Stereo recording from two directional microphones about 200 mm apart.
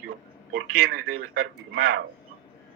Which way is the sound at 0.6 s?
90° right.